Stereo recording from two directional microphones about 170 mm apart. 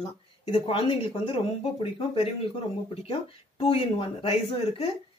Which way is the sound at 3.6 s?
35° left (ahead or behind).